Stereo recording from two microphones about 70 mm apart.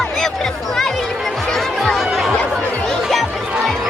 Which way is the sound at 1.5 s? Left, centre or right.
Centre.